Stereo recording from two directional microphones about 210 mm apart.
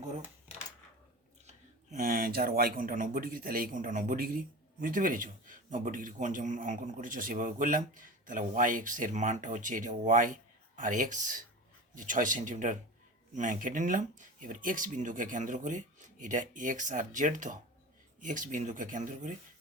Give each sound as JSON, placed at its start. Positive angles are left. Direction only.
{"t": 1.5, "sound": "speech", "side_deg": -40}